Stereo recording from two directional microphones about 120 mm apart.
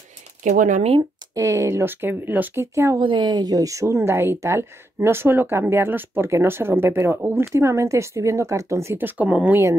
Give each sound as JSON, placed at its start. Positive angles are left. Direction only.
{"t": 0.4, "sound": "speech", "side_deg": -90}
{"t": 1.3, "sound": "speech", "side_deg": -25}
{"t": 3.0, "sound": "speech", "side_deg": -40}